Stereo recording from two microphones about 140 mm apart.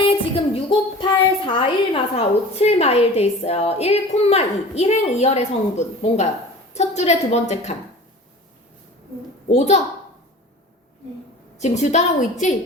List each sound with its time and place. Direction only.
0.0 s a sound: 45° left (ahead or behind)
1.5 s a woman's voice: 40° left (ahead or behind)
9.5 s a woman's voice: 50° left (ahead or behind)
11.8 s a woman's voice: 55° left (ahead or behind)